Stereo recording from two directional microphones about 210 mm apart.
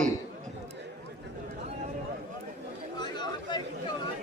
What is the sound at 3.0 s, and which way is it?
Chatter, 20° left (ahead or behind).